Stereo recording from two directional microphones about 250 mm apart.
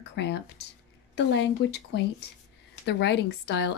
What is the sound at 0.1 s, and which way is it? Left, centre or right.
Speech, left.